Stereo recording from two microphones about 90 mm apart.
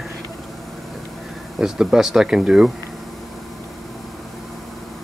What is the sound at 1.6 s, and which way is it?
Speech, 5° right (ahead or behind).